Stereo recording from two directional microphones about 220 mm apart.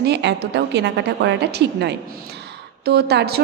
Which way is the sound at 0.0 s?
50° right (ahead or behind).